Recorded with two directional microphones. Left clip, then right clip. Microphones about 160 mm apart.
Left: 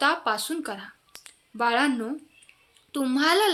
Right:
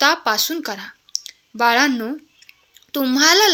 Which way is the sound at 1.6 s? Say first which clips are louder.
Right 8 dB; 40° right (ahead or behind).